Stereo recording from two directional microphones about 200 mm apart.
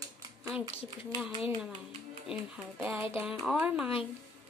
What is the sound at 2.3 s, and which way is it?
Speech, 5° right (ahead or behind).